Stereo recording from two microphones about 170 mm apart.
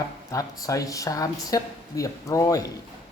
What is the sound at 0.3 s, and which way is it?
Speech, 20° left (ahead or behind).